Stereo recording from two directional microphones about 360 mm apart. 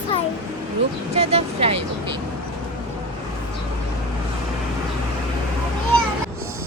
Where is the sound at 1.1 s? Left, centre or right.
Centre.